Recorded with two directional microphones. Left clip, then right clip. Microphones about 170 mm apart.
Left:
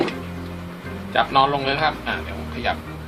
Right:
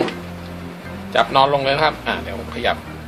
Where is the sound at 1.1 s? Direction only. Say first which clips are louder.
Right 3 dB; 45° right (ahead or behind).